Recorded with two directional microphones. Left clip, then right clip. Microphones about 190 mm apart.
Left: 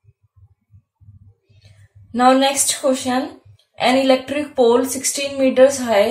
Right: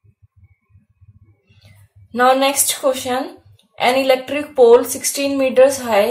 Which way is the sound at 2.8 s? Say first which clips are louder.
Right 1 dB; 40° right (ahead or behind).